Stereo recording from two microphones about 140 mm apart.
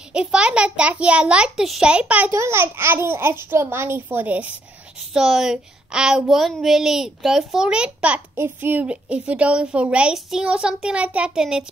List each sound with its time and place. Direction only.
0.1 s speech: 5° right (ahead or behind)